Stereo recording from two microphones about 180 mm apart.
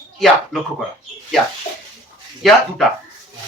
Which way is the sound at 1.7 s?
35° left (ahead or behind).